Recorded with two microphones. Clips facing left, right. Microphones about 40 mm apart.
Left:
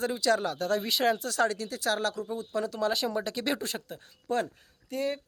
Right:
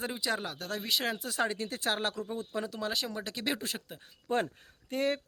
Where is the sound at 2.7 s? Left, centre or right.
Centre.